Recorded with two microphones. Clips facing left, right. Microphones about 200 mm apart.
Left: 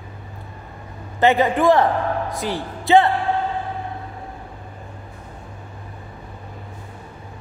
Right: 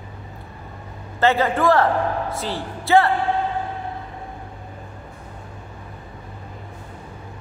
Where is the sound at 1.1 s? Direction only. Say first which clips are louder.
Left 2 dB; 15° left (ahead or behind).